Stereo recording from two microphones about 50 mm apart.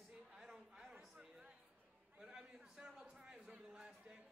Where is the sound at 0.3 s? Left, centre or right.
Centre.